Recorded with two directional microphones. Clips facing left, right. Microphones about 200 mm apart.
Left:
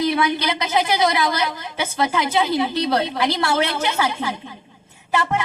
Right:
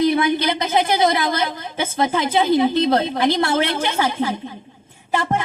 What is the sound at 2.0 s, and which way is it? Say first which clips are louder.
Speech: right 2 dB; 50° right (ahead or behind).